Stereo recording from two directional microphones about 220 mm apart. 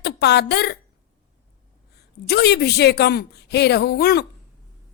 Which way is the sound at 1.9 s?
45° left (ahead or behind).